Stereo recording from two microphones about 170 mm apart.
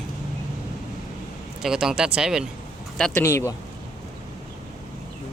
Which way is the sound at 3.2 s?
15° left (ahead or behind).